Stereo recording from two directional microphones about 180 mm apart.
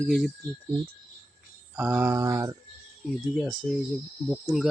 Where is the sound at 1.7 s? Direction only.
10° right (ahead or behind).